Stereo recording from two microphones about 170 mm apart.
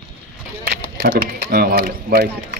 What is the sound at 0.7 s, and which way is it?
Speech, 65° right (ahead or behind).